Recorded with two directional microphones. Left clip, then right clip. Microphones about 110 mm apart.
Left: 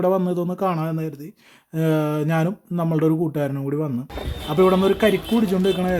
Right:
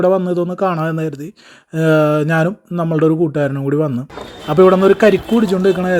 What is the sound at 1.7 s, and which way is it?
A man's voice, 40° right (ahead or behind).